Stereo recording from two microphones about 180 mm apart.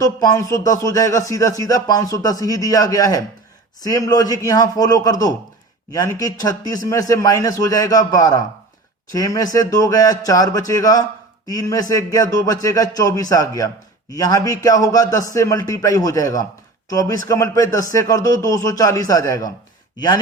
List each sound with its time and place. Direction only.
0.0 s speech: 20° left (ahead or behind)